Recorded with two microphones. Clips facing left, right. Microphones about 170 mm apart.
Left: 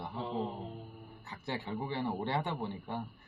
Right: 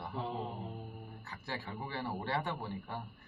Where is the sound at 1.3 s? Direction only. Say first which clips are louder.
Left 5 dB; 25° left (ahead or behind).